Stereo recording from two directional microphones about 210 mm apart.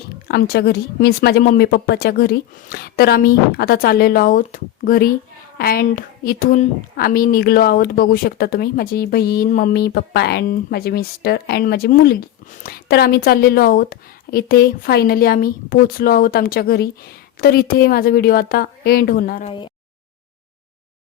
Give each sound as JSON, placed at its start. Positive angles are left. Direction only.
{"t": 0.3, "sound": "a woman's voice", "side_deg": 50}
{"t": 19.5, "sound": "speech", "side_deg": 25}